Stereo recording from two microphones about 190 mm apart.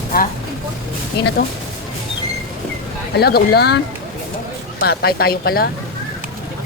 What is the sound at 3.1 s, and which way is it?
Speech, 55° left (ahead or behind).